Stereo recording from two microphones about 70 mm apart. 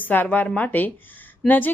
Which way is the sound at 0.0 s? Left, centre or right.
Left.